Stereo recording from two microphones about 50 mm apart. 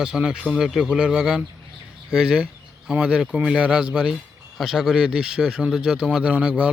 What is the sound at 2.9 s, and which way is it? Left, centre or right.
A man's voice, right.